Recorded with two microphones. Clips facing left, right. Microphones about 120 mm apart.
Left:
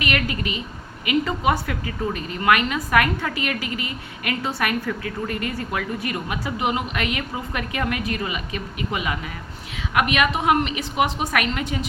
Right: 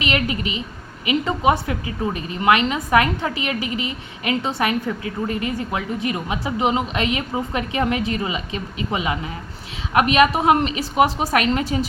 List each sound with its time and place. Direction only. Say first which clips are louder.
0.0 s a woman's voice: right 2 dB; 20° right (ahead or behind)